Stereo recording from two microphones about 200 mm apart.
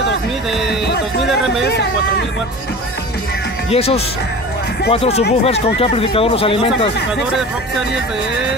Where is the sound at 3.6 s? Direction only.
30° left (ahead or behind).